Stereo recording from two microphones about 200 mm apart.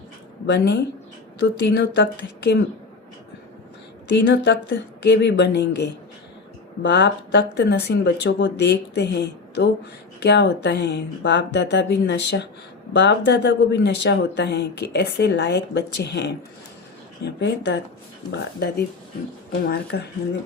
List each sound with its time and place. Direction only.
0.4 s speech: 60° left (ahead or behind)
1.8 s speech: 60° left (ahead or behind)
4.1 s speech: 60° left (ahead or behind)
19.6 s speech: 55° left (ahead or behind)